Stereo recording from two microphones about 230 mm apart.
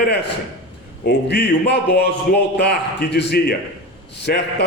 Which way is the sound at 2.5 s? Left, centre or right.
Left.